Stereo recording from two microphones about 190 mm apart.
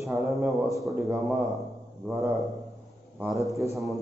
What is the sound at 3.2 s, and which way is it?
Speech, centre (ahead or behind).